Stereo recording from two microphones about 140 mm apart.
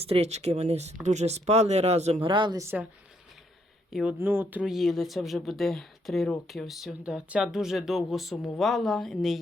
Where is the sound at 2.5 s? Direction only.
15° right (ahead or behind).